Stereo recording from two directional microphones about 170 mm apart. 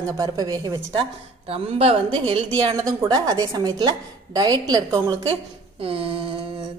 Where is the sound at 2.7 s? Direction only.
20° right (ahead or behind).